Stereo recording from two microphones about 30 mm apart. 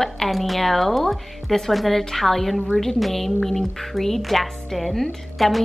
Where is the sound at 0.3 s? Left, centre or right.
Centre.